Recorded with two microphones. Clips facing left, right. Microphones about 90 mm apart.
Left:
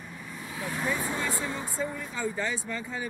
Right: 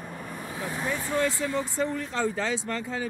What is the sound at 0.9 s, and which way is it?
Vehicle, 20° left (ahead or behind).